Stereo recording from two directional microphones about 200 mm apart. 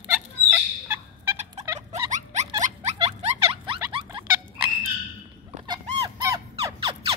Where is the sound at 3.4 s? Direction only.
25° right (ahead or behind).